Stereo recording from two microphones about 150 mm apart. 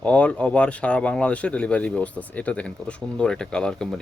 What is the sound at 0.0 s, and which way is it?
Speech, 10° left (ahead or behind).